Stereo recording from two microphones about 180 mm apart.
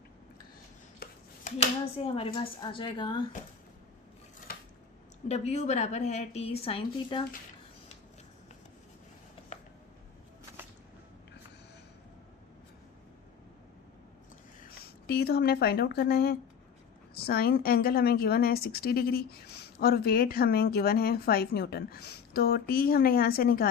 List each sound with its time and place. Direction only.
1.0 s a sound: 60° left (ahead or behind)
1.5 s a woman's voice: 40° left (ahead or behind)
5.3 s a woman's voice: 40° left (ahead or behind)
14.8 s a woman's voice: 60° left (ahead or behind)